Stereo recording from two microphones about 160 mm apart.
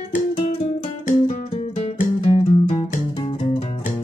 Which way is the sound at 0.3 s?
35° left (ahead or behind).